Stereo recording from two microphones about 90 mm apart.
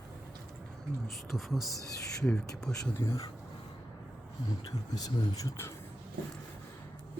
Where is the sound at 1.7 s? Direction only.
40° left (ahead or behind).